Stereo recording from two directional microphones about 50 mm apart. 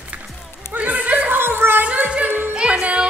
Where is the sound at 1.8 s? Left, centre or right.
Right.